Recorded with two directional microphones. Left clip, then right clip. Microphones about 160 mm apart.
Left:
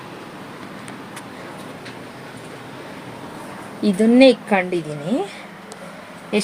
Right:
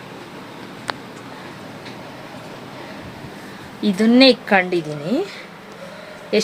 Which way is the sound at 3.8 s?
10° right (ahead or behind).